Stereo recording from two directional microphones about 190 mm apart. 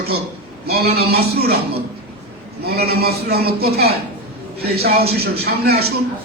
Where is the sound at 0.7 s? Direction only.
55° right (ahead or behind).